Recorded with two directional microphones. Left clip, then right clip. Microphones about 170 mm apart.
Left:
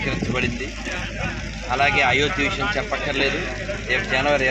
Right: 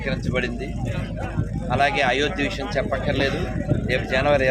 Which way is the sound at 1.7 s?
30° right (ahead or behind).